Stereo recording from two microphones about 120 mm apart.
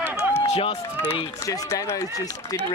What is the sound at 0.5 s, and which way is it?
Speech, 60° left (ahead or behind).